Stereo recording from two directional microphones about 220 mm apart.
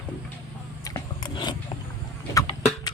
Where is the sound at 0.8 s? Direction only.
20° left (ahead or behind).